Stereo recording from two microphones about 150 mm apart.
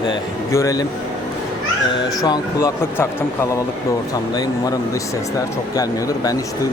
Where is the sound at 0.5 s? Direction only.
20° left (ahead or behind).